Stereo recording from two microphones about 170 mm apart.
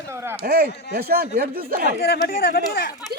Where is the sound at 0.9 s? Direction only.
65° right (ahead or behind).